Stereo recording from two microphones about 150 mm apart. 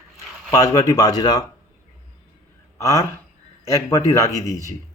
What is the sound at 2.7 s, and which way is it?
A man's voice, 20° left (ahead or behind).